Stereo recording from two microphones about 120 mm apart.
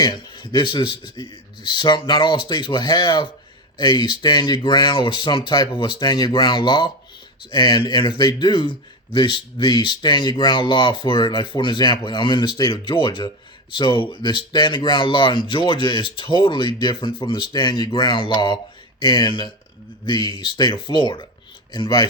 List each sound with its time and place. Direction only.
0.0 s speech: 40° left (ahead or behind)